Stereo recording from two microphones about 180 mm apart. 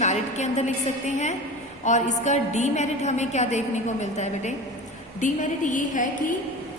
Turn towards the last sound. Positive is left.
turn(degrees=45)  # may be behind; listen again after turning